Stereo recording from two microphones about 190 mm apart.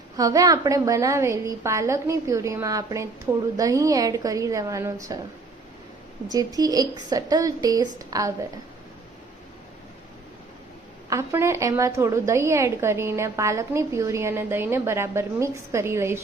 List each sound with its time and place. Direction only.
0.2 s a woman's voice: 20° right (ahead or behind)
6.3 s speech: 20° right (ahead or behind)
11.1 s a woman's voice: 15° right (ahead or behind)